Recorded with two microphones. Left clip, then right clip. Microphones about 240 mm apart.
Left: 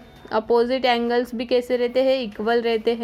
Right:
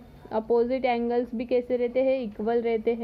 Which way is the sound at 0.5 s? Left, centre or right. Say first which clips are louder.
Left 5 dB; centre.